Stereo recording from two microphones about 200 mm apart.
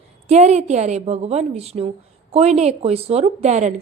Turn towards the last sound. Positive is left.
turn(degrees=-35)  # may be behind; listen again after turning